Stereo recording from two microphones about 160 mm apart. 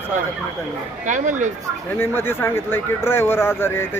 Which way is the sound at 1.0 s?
50° right (ahead or behind).